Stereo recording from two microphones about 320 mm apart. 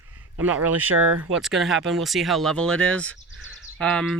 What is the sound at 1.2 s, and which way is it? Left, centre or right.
Speech, centre.